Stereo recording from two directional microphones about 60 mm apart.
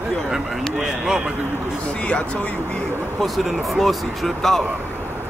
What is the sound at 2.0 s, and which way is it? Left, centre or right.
Speech, left.